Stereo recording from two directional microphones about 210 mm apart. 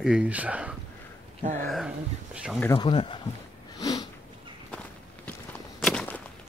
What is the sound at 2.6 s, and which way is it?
Speech, 20° left (ahead or behind).